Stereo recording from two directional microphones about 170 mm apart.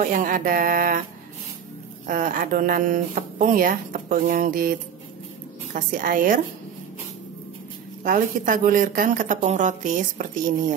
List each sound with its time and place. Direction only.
0.0 s speech: 50° right (ahead or behind)
2.0 s speech: 50° right (ahead or behind)
8.0 s speech: 50° right (ahead or behind)